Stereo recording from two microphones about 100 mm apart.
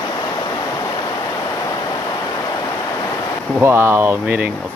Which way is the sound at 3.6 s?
25° right (ahead or behind).